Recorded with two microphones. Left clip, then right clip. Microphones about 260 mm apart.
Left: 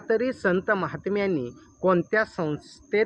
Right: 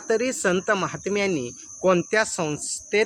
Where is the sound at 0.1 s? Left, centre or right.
Centre.